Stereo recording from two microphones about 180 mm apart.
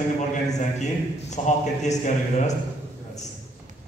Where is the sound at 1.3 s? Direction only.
40° left (ahead or behind).